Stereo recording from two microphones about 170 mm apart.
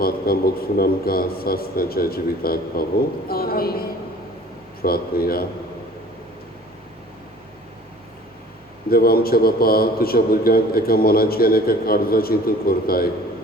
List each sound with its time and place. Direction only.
0.0 s a man's voice: 60° left (ahead or behind)
8.9 s a man's voice: 60° left (ahead or behind)